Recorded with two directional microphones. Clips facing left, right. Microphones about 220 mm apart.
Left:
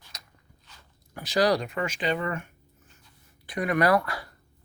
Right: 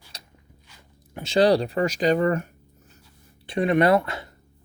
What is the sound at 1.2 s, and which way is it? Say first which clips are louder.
Speech: right 5 dB; 25° right (ahead or behind).